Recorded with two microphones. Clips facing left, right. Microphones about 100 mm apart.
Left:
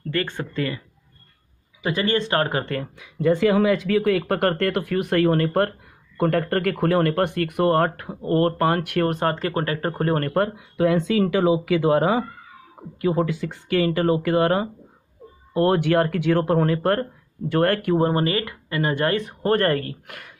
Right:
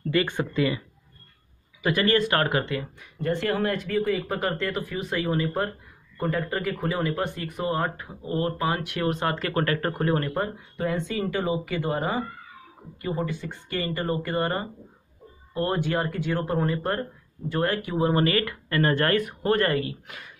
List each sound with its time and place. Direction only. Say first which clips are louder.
0.1 s speech: right 1 dB; 15° right (ahead or behind)
1.8 s speech: even; 25° left (ahead or behind)
3.6 s speech: left 6 dB; 90° left; by 10.0 s 30° left (ahead or behind)
10.0 s speech: left 3 dB; 45° left (ahead or behind)
10.3 s speech: left 7 dB; 80° left
15.5 s speech: left 7 dB; 70° left (ahead or behind)
18.0 s speech: left 1 dB; 30° left (ahead or behind)
19.4 s speech: left 5 dB; 45° left (ahead or behind)